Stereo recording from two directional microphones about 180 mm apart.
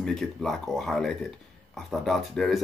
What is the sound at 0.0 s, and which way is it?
Speech, centre (ahead or behind).